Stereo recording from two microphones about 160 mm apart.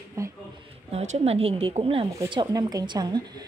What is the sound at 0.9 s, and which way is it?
A woman's voice, 40° right (ahead or behind).